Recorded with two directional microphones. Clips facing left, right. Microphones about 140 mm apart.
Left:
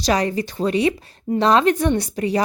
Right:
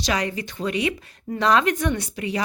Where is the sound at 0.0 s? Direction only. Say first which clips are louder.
Left 6 dB; 35° left (ahead or behind).